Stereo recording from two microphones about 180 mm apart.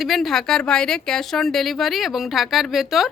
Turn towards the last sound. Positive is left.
turn(degrees=0)  # may be behind; listen again after turning